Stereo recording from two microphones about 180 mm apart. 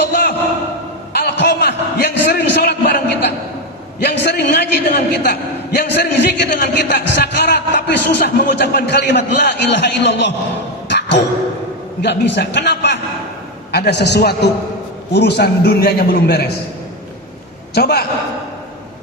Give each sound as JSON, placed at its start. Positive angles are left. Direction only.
{"t": 0.0, "sound": "a sound", "side_deg": 65}
{"t": 4.0, "sound": "a man's voice", "side_deg": 65}
{"t": 6.5, "sound": "a man's voice", "side_deg": 60}
{"t": 10.8, "sound": "a sound", "side_deg": 75}
{"t": 12.0, "sound": "a man's voice", "side_deg": 70}
{"t": 17.7, "sound": "a man's voice", "side_deg": 60}